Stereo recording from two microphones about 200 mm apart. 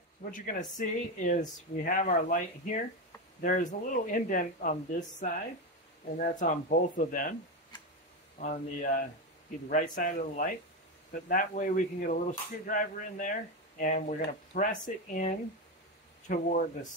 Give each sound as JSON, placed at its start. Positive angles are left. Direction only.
{"t": 0.2, "sound": "speech", "side_deg": 45}
{"t": 6.1, "sound": "speech", "side_deg": 40}
{"t": 8.4, "sound": "speech", "side_deg": 40}